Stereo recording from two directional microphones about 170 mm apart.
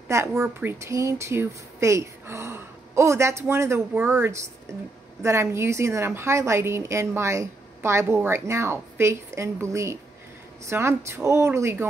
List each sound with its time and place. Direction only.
0.1 s a woman's voice: 15° right (ahead or behind)